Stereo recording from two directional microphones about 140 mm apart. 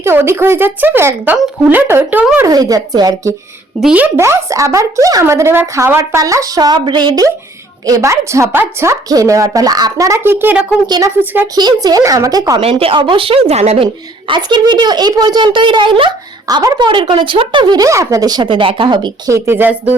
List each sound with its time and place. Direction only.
0.0 s speech: 15° right (ahead or behind)
2.5 s a woman's voice: 25° right (ahead or behind)
3.8 s a woman's voice: 10° right (ahead or behind)
10.8 s a woman's voice: 30° right (ahead or behind)
12.8 s speech: 40° right (ahead or behind)
13.8 s speech: 35° right (ahead or behind)
19.3 s speech: 15° right (ahead or behind)